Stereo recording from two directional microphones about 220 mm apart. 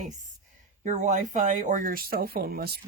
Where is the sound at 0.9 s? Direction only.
35° right (ahead or behind).